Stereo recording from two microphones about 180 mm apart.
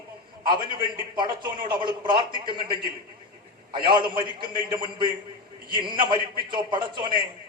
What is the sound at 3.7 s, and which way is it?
Speech, 25° right (ahead or behind).